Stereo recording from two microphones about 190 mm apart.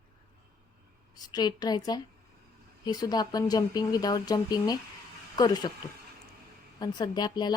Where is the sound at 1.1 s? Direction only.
20° left (ahead or behind).